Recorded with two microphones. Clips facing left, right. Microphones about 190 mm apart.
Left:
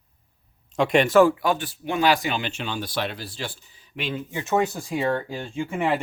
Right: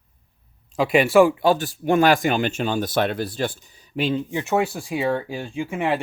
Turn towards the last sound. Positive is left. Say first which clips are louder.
# right 1 dB
turn(degrees=-10)  # may be behind; listen again after turning